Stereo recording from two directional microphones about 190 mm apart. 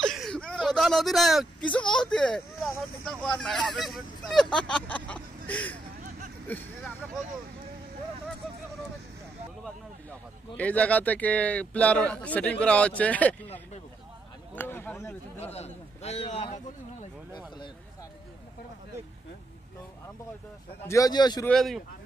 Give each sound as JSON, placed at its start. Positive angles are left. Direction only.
{"t": 0.0, "sound": "a man's voice", "side_deg": 0}
{"t": 10.6, "sound": "a man's voice", "side_deg": 5}
{"t": 15.4, "sound": "a man's voice", "side_deg": 35}
{"t": 20.8, "sound": "a man's voice", "side_deg": 15}
{"t": 21.5, "sound": "speech", "side_deg": 0}